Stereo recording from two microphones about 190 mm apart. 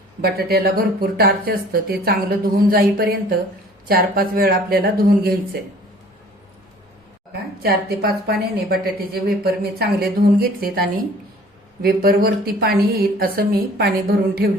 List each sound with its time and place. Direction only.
0.2 s a woman's voice: 55° right (ahead or behind)
7.6 s a woman's voice: 55° right (ahead or behind)